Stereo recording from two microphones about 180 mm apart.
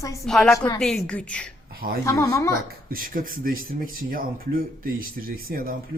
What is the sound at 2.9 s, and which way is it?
Speech, 50° right (ahead or behind).